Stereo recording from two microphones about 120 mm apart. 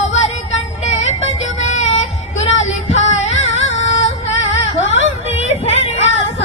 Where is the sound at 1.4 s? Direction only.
70° left (ahead or behind).